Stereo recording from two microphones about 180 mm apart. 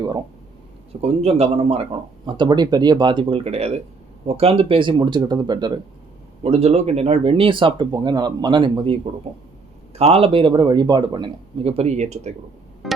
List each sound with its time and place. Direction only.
1.0 s speech: 35° right (ahead or behind)
6.4 s speech: 35° right (ahead or behind)
12.8 s music: centre (ahead or behind)